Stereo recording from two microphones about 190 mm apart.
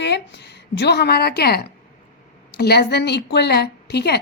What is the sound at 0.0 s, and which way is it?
A woman's voice, 65° left (ahead or behind).